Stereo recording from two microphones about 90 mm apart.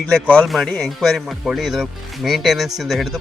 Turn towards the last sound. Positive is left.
turn(degrees=0)  # may be behind; listen again after turning